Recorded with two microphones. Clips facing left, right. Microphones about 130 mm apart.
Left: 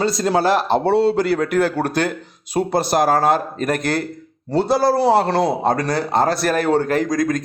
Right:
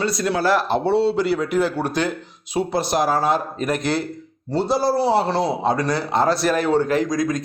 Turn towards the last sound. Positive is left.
turn(degrees=50)  # may be behind; listen again after turning